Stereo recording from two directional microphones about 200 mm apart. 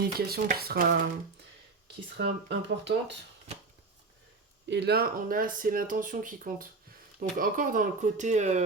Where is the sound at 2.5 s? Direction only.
60° right (ahead or behind).